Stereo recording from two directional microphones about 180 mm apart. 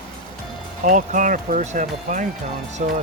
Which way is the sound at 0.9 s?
45° right (ahead or behind).